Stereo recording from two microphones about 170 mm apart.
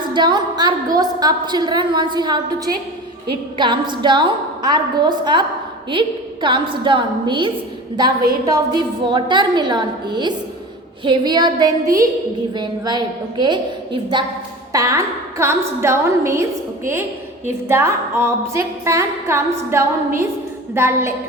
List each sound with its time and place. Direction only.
0.1 s a woman's voice: 25° right (ahead or behind)
3.6 s a woman's voice: 25° right (ahead or behind)
14.7 s music: 20° right (ahead or behind)